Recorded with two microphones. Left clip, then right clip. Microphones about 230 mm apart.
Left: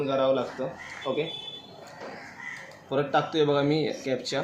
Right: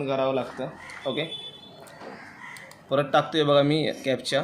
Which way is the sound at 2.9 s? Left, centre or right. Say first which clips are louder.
Right 3 dB; right.